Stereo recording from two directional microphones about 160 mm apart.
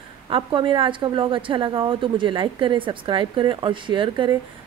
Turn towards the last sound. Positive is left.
turn(degrees=-30)  # may be behind; listen again after turning